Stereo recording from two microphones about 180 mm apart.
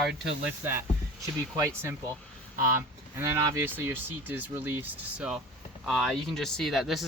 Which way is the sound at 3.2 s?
15° right (ahead or behind).